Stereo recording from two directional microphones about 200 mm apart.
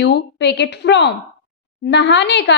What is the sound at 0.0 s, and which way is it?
Speech, 60° left (ahead or behind).